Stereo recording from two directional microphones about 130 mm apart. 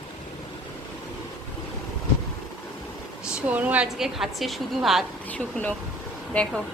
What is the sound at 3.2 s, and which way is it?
A woman's voice, 10° right (ahead or behind).